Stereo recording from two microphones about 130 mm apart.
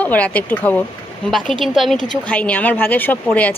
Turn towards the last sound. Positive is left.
turn(degrees=10)  # may be behind; listen again after turning